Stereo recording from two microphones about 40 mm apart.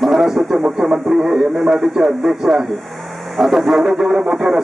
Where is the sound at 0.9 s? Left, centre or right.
Centre.